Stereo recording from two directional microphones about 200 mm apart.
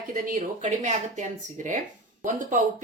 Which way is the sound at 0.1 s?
40° right (ahead or behind).